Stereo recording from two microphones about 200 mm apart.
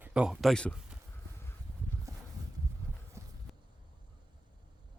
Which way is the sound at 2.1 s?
15° right (ahead or behind).